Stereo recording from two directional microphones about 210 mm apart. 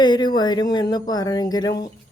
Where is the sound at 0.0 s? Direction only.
20° left (ahead or behind).